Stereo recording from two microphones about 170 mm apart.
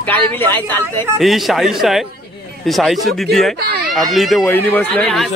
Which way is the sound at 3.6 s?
65° right (ahead or behind).